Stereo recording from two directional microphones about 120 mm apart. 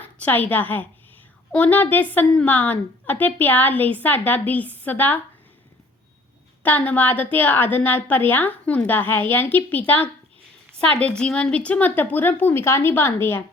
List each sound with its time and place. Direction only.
0.0 s a woman's voice: 15° left (ahead or behind)
6.6 s a woman's voice: 15° left (ahead or behind)